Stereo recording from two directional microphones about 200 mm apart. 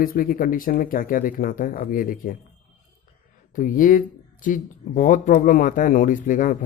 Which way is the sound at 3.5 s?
40° left (ahead or behind).